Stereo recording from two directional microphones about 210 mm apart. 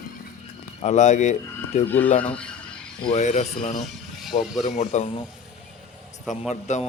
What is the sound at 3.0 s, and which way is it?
Speech, 30° left (ahead or behind).